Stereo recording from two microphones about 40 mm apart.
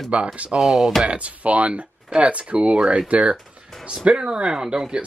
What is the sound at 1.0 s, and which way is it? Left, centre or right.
Speech, right.